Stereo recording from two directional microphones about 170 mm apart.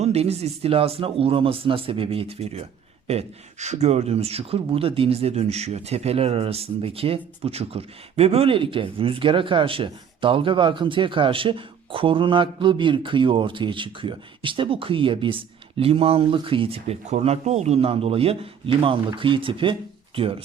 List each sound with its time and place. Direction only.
0.0 s speech: 40° right (ahead or behind)